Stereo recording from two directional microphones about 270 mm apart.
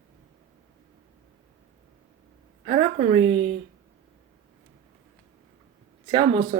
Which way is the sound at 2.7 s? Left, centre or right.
Right.